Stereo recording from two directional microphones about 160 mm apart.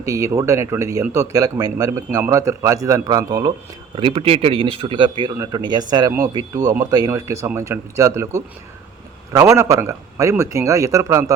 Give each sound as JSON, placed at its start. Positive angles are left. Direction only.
{"t": 0.0, "sound": "speech", "side_deg": -20}
{"t": 3.9, "sound": "a man's voice", "side_deg": -35}